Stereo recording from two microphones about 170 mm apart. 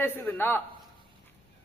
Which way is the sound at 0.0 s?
15° left (ahead or behind).